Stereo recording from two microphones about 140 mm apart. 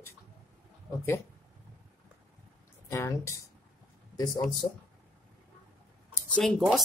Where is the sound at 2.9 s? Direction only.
20° left (ahead or behind).